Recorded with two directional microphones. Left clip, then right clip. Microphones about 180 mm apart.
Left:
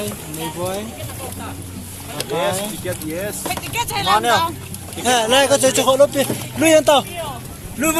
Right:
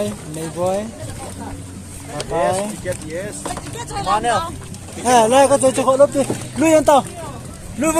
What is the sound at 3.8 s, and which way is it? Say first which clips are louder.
Speech: left 2 dB; 50° left (ahead or behind).